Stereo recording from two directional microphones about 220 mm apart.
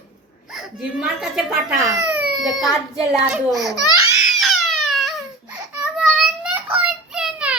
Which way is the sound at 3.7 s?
15° left (ahead or behind).